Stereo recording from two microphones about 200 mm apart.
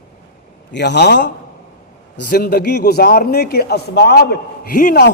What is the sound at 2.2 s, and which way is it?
A man's voice, 50° left (ahead or behind).